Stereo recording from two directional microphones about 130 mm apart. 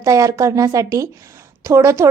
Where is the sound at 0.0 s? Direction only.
25° right (ahead or behind).